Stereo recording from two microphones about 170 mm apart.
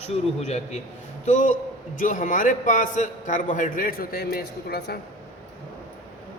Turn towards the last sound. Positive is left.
turn(degrees=70)  # may be behind; listen again after turning